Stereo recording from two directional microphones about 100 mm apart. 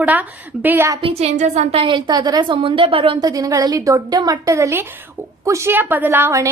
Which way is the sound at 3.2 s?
40° right (ahead or behind).